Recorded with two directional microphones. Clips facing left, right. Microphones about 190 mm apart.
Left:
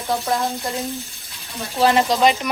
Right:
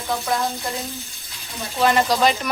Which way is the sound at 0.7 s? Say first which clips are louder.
Left 4 dB; centre (ahead or behind).